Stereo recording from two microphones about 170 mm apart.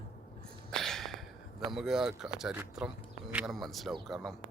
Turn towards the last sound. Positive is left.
turn(degrees=0)  # may be behind; listen again after turning